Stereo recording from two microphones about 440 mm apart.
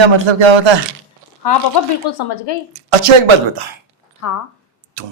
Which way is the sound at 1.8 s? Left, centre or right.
Left.